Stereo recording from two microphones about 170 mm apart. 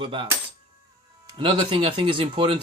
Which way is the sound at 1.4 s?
30° right (ahead or behind).